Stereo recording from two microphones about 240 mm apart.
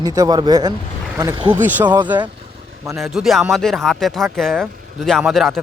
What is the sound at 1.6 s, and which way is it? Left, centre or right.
Speech, centre.